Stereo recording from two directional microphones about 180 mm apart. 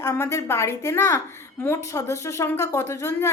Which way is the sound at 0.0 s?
15° left (ahead or behind).